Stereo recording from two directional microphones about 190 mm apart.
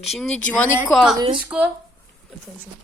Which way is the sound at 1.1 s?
25° right (ahead or behind).